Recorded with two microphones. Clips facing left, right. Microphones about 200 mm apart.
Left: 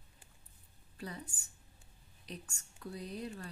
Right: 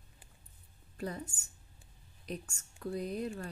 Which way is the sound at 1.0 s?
45° right (ahead or behind).